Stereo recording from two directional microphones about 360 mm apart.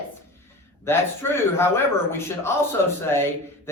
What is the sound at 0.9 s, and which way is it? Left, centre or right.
Speech, centre.